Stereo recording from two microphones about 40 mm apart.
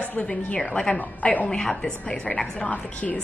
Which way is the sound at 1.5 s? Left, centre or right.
Centre.